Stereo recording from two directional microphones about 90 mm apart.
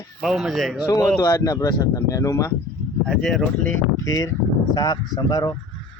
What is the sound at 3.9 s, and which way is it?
A man's voice, 35° left (ahead or behind).